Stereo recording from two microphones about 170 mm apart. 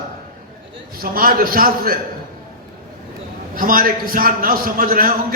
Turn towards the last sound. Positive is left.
turn(degrees=-55)  # may be behind; listen again after turning